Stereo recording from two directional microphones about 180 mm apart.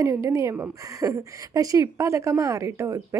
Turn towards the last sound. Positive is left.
turn(degrees=-15)  # may be behind; listen again after turning